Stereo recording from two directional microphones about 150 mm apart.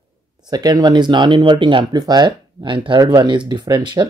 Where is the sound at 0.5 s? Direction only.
25° right (ahead or behind).